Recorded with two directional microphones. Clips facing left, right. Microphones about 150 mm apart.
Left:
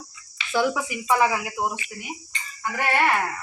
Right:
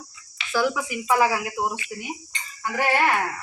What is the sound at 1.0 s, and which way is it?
Speech, 5° right (ahead or behind).